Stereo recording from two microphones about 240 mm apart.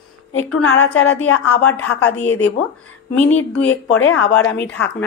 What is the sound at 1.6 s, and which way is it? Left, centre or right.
Speech, centre.